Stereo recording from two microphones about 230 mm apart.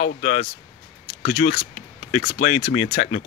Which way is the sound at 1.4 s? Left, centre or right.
Left.